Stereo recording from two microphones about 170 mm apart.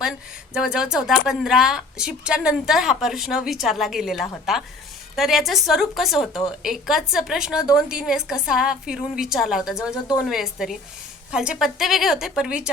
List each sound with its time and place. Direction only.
0.5 s speech: 5° right (ahead or behind)
9.9 s a woman's voice: 20° left (ahead or behind)
10.2 s speech: centre (ahead or behind)